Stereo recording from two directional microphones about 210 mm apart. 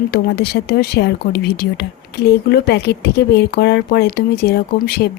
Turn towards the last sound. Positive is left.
turn(degrees=50)  # may be behind; listen again after turning